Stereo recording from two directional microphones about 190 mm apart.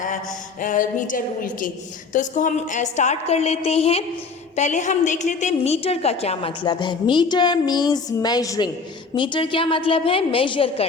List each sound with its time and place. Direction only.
0.6 s a woman's voice: 45° left (ahead or behind); by 10.8 s 30° left (ahead or behind)